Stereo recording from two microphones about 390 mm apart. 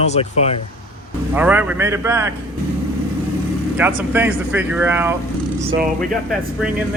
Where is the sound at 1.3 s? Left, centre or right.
Centre.